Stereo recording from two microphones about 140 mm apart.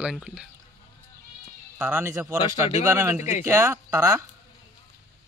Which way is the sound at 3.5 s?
20° right (ahead or behind).